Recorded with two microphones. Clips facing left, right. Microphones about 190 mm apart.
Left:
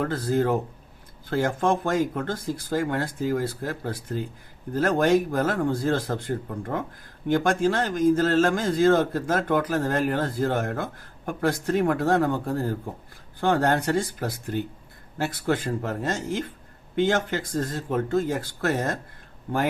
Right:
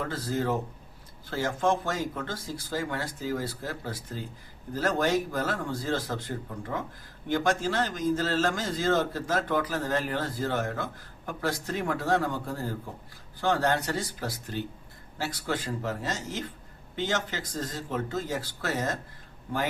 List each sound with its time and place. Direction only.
0.0 s a man's voice: 55° left (ahead or behind)